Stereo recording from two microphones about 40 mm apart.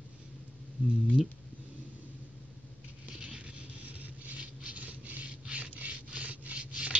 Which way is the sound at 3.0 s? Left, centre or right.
Right.